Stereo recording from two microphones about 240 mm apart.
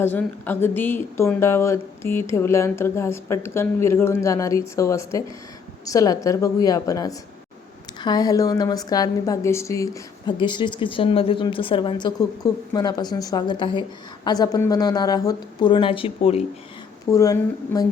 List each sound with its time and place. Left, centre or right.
0.0 s a woman's voice: centre; by 16.4 s left
17.1 s a woman's voice: centre